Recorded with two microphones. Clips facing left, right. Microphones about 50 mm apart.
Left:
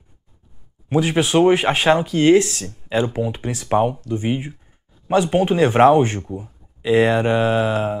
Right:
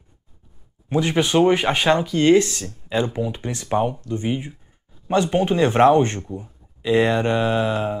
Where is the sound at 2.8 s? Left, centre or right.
Centre.